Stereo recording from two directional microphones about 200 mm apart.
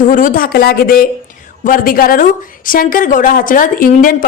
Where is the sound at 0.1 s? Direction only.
45° left (ahead or behind).